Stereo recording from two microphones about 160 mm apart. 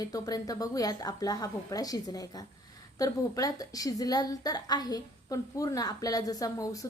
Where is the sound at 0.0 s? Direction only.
20° left (ahead or behind).